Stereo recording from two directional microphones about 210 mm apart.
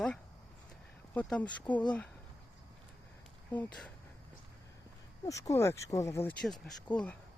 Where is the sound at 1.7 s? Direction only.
20° left (ahead or behind).